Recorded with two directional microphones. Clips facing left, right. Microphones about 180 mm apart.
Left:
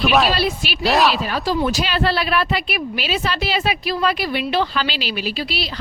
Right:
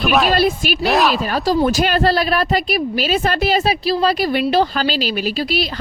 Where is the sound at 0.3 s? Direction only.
50° right (ahead or behind).